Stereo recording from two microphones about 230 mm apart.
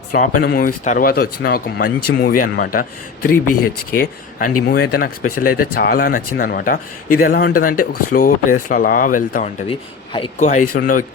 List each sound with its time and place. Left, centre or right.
0.1 s speech: left
2.1 s speech: left
2.4 s speech: left
3.9 s speech: left
9.6 s speech: left